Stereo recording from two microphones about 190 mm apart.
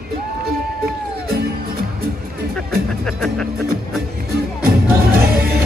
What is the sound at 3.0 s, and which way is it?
Music, centre (ahead or behind).